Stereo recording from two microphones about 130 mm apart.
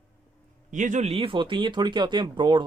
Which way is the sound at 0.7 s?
75° right (ahead or behind).